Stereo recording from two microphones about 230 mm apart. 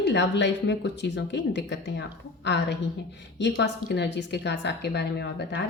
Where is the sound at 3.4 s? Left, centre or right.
Left.